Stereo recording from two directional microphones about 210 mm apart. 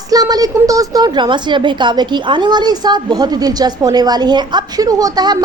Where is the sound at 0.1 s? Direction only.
20° right (ahead or behind).